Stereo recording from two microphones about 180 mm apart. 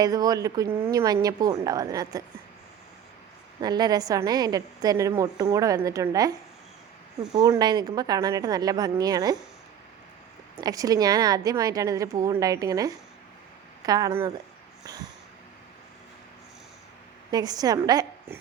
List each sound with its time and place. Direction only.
0.0 s a woman's voice: 20° right (ahead or behind)
3.6 s a woman's voice: 20° right (ahead or behind)
7.3 s a woman's voice: 20° right (ahead or behind)
10.6 s a woman's voice: 20° right (ahead or behind)
17.3 s a woman's voice: 20° right (ahead or behind)